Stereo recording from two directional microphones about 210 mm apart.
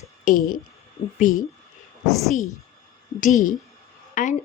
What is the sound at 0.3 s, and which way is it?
Speech, 40° left (ahead or behind).